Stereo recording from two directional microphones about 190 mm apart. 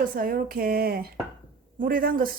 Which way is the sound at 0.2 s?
50° right (ahead or behind).